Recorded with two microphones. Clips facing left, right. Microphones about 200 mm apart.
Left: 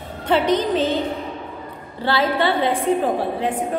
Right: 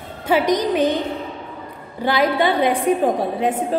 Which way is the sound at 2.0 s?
15° right (ahead or behind).